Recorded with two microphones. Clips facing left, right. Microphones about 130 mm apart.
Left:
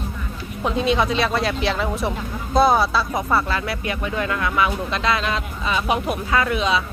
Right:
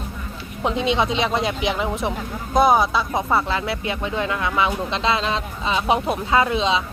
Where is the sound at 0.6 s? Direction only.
20° right (ahead or behind).